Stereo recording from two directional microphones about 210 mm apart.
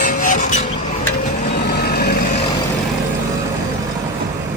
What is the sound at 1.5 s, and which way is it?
Reversing beeps, 50° left (ahead or behind).